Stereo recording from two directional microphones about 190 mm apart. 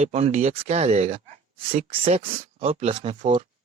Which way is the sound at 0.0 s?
35° right (ahead or behind).